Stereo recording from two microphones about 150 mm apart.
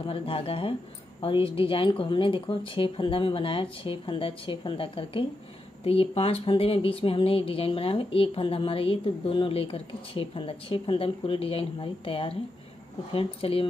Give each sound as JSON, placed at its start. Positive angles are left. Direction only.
{"t": 0.0, "sound": "speech", "side_deg": 40}